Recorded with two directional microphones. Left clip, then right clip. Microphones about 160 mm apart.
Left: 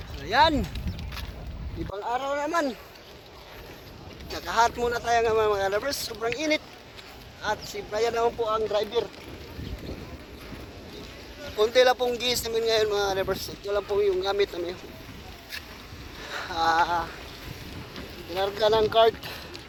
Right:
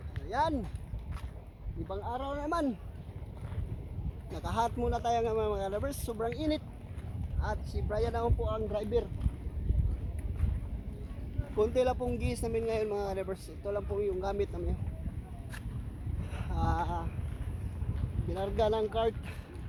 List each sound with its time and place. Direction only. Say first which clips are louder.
0.3 s speech: left 11 dB; 10° left (ahead or behind)
2.0 s speech: left 10 dB; 20° left (ahead or behind)
4.4 s speech: left 9 dB; 5° left (ahead or behind)
7.4 s speech: left 8 dB; 25° left (ahead or behind)
11.5 s speech: left 9 dB; centre (ahead or behind)
13.1 s speech: left 9 dB; 15° left (ahead or behind)
16.3 s speech: left 12 dB; 10° left (ahead or behind)
18.3 s speech: left 8 dB; 5° left (ahead or behind)